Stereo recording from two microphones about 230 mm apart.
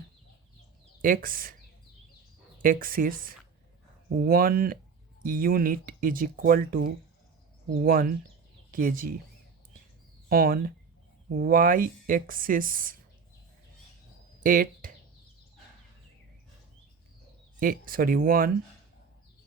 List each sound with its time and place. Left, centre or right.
1.0 s speech: right
2.6 s speech: right
10.2 s speech: right
14.4 s speech: right
17.6 s speech: right